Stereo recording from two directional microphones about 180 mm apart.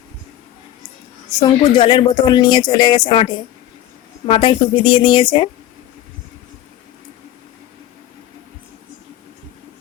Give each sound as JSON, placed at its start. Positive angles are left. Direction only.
{"t": 1.4, "sound": "speech", "side_deg": 25}